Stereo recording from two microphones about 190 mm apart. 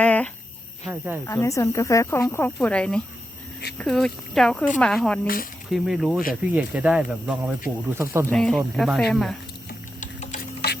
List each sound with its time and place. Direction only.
0.0 s a sound: 5° left (ahead or behind)
0.9 s speech: 10° right (ahead or behind)
1.3 s speech: 15° left (ahead or behind)
5.2 s speech: 50° left (ahead or behind)
5.7 s speech: centre (ahead or behind)
8.3 s speech: 5° left (ahead or behind)
10.0 s tick-tock: 40° left (ahead or behind)